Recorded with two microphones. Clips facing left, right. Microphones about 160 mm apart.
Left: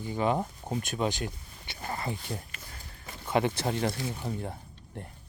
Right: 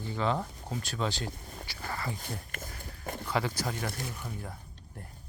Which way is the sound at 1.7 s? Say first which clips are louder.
Left 3 dB; 25° left (ahead or behind).